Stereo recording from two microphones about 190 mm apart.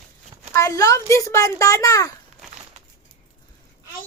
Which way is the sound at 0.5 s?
15° left (ahead or behind).